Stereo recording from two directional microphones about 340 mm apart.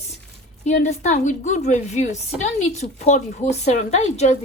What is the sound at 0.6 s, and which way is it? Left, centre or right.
A woman's voice, centre.